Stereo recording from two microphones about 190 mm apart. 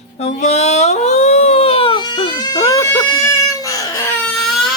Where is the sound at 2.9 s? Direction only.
15° left (ahead or behind).